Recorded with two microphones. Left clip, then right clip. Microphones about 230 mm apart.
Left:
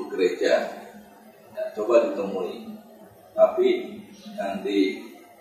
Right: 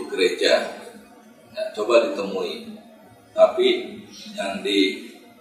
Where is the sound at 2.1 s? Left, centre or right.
Left.